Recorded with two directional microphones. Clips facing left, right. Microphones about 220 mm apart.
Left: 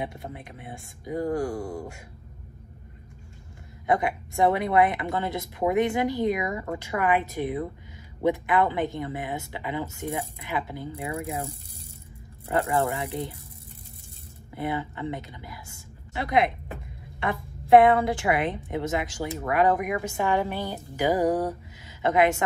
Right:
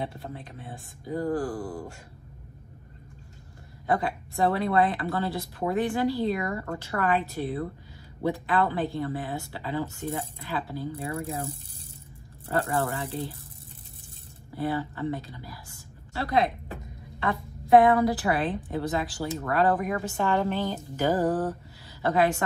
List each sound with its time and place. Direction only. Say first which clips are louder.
0.0 s a woman's voice: left 1 dB; 15° left (ahead or behind)
3.8 s speech: left 2 dB; 20° left (ahead or behind)
12.4 s a woman's voice: left 2 dB; 15° left (ahead or behind)
14.5 s a woman's voice: right 1 dB; 20° left (ahead or behind)